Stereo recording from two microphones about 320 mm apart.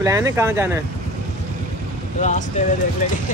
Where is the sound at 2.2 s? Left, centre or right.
Left.